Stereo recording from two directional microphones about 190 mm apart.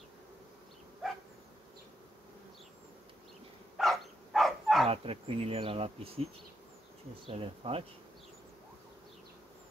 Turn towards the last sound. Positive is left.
turn(degrees=-30)  # may be behind; listen again after turning